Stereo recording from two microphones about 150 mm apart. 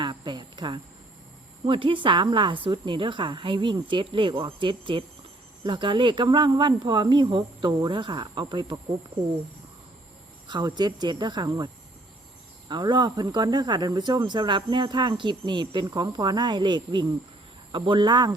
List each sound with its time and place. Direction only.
0.0 s cricket: 30° right (ahead or behind)
1.6 s a woman's voice: 35° right (ahead or behind)
10.5 s a woman's voice: 30° right (ahead or behind)